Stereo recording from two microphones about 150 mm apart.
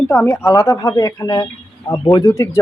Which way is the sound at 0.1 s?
20° left (ahead or behind).